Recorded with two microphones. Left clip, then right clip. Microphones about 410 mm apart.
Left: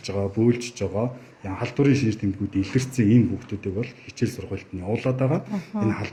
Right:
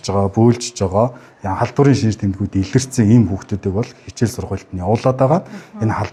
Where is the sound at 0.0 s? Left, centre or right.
Right.